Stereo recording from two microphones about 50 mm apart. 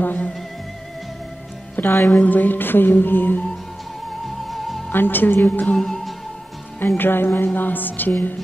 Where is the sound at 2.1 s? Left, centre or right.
Left.